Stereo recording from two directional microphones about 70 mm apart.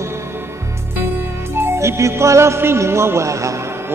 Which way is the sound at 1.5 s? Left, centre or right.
Right.